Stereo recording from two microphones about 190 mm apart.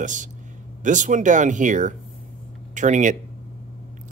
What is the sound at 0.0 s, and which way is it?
Speech, 40° right (ahead or behind).